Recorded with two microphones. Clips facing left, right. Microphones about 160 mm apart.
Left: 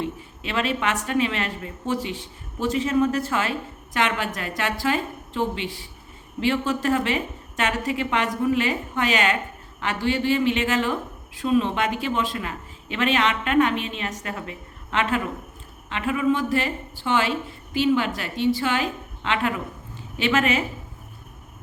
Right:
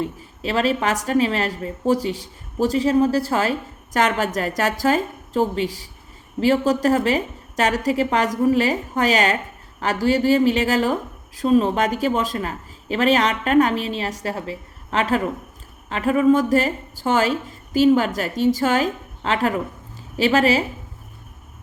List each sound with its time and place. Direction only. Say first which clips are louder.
0.0 s speech: right 4 dB; 35° right (ahead or behind)